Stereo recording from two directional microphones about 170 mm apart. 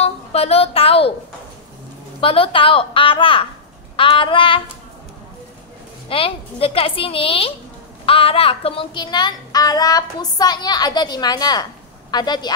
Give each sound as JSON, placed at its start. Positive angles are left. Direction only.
{"t": 0.0, "sound": "a woman's voice", "side_deg": 35}
{"t": 2.1, "sound": "a woman's voice", "side_deg": 35}
{"t": 6.0, "sound": "a woman's voice", "side_deg": 35}